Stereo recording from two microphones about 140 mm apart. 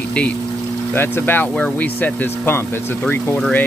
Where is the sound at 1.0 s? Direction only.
15° left (ahead or behind).